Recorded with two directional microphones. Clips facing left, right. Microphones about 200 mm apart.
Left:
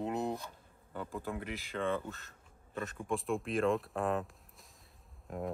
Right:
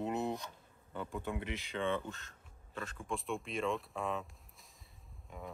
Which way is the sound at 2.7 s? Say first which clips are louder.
Left 4 dB; 20° left (ahead or behind).